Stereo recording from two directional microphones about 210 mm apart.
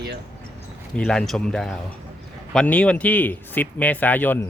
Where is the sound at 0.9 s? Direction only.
5° left (ahead or behind).